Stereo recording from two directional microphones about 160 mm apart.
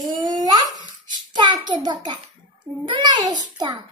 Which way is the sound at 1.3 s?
25° right (ahead or behind).